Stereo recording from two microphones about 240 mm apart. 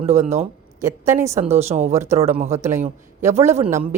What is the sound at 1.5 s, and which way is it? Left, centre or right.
Speech, right.